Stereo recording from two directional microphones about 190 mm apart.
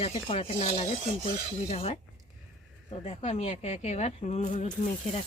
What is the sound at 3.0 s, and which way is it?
Speech, 35° left (ahead or behind).